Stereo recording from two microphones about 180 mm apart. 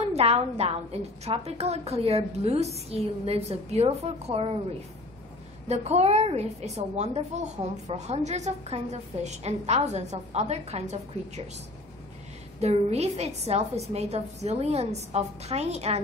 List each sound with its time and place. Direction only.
0.0 s a woman's voice: 35° right (ahead or behind)
5.7 s a woman's voice: 35° right (ahead or behind)
12.5 s a woman's voice: 35° right (ahead or behind)